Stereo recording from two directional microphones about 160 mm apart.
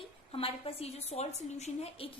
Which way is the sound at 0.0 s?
35° left (ahead or behind).